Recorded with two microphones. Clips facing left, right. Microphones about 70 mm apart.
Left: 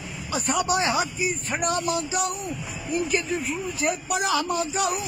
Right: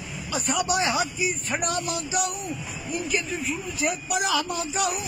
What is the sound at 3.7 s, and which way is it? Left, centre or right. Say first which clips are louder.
Speech: even; left.